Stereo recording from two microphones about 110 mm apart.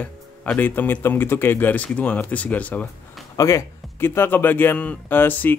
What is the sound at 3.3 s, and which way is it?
A man's voice, 30° left (ahead or behind).